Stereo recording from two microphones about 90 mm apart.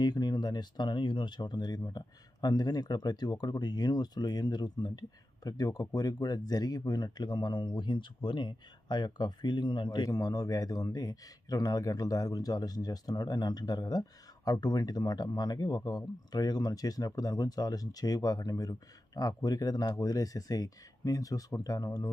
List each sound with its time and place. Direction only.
0.0 s speech: 50° left (ahead or behind)
10.1 s speech: 40° left (ahead or behind)